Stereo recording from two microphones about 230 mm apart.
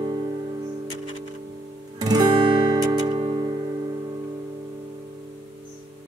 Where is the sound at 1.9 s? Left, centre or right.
Centre.